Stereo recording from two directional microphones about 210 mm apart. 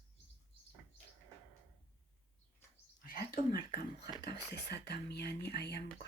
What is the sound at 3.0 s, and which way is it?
Speech, 45° left (ahead or behind).